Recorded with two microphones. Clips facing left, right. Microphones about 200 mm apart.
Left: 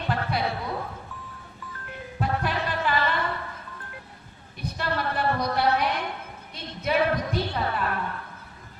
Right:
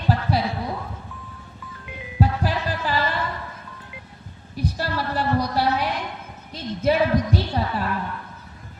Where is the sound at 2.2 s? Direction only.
35° right (ahead or behind).